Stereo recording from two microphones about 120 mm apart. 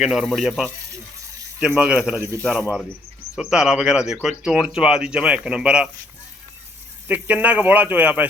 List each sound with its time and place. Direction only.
0.0 s speech: 5° right (ahead or behind)
2.1 s a man's voice: 20° right (ahead or behind)
2.4 s speech: centre (ahead or behind)
7.1 s speech: 10° right (ahead or behind)